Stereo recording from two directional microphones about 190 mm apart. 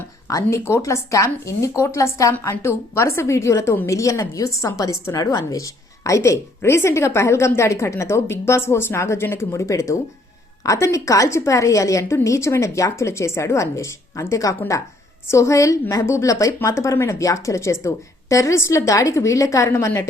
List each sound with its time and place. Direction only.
0.3 s speech: 15° left (ahead or behind)